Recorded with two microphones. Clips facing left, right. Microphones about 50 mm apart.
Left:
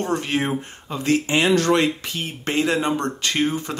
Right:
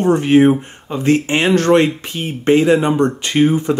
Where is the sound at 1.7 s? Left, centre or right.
Right.